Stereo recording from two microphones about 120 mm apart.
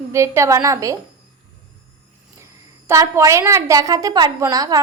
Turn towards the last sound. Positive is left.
turn(degrees=-30)  # may be behind; listen again after turning